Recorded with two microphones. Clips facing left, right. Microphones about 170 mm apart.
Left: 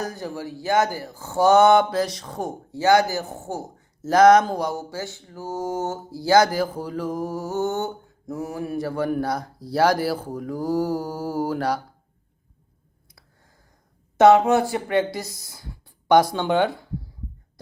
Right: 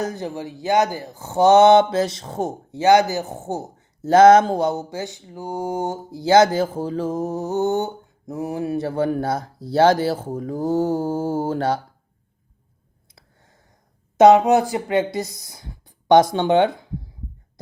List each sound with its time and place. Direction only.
0.0 s speech: 20° right (ahead or behind)
13.1 s a sound: 25° right (ahead or behind)
14.2 s speech: 20° right (ahead or behind)